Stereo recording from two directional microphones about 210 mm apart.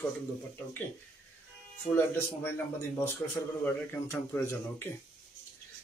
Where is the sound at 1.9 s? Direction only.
10° left (ahead or behind).